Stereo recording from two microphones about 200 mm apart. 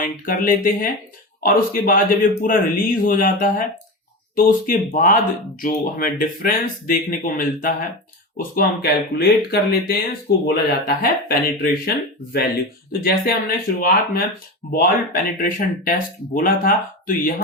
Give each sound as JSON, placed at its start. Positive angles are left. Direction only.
{"t": 0.0, "sound": "speech", "side_deg": 45}
{"t": 14.7, "sound": "speech", "side_deg": 45}